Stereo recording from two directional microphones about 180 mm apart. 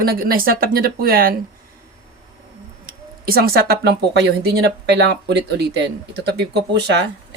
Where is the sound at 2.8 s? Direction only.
55° right (ahead or behind).